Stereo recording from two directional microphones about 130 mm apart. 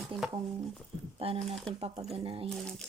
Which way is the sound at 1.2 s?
45° right (ahead or behind).